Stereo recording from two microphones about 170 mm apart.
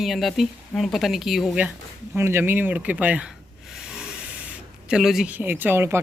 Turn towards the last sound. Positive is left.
turn(degrees=-15)  # may be behind; listen again after turning